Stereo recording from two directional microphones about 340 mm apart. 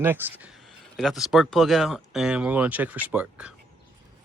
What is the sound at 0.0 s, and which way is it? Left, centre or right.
Speech, centre.